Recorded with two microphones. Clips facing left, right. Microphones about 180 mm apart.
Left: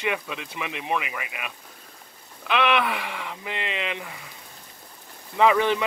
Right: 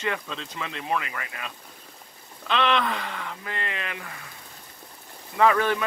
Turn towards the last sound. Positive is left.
turn(degrees=15)  # may be behind; listen again after turning